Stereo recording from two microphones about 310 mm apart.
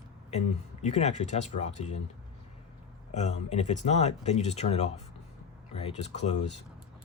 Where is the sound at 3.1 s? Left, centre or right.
Left.